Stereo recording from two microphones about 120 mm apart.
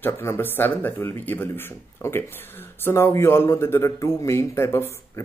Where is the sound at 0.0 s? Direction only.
20° left (ahead or behind).